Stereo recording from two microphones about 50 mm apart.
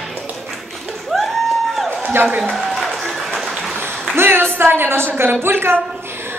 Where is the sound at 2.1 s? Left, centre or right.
Right.